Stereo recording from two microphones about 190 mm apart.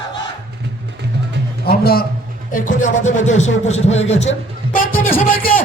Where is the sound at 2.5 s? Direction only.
40° left (ahead or behind).